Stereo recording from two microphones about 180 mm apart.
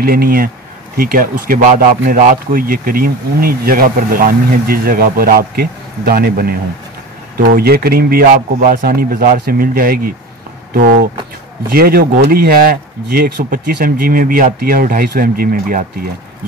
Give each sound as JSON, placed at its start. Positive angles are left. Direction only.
{"t": 0.0, "sound": "a man's voice", "side_deg": -55}